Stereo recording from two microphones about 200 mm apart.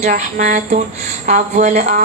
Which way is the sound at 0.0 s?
35° right (ahead or behind).